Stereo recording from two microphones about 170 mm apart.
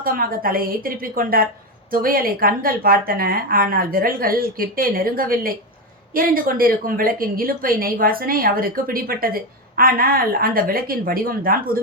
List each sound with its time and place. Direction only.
0.0 s a woman's voice: 55° right (ahead or behind)